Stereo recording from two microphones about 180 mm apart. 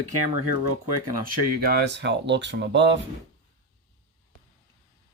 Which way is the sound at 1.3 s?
65° right (ahead or behind).